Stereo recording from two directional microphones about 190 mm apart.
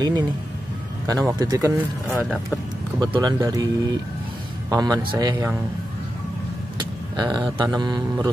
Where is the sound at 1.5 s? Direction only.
15° right (ahead or behind).